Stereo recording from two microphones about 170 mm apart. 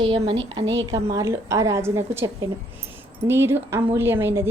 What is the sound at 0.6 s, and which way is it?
Speech, 90° right.